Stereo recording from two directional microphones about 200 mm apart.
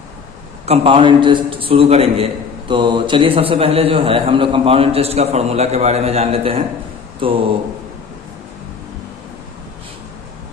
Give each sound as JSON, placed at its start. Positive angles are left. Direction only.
{"t": 0.6, "sound": "a man's voice", "side_deg": -30}